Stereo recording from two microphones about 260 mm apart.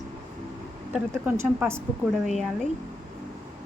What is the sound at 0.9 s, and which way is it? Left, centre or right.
Speech, centre.